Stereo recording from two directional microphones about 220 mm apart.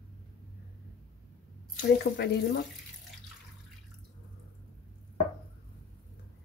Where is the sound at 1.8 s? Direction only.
50° left (ahead or behind).